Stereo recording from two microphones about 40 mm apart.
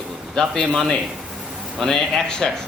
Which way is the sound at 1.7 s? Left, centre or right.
Centre.